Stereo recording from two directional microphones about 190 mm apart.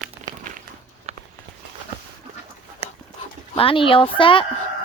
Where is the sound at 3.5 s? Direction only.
30° left (ahead or behind).